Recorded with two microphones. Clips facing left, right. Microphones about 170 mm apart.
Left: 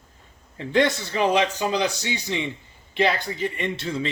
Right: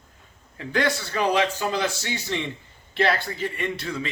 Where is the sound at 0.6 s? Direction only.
20° left (ahead or behind).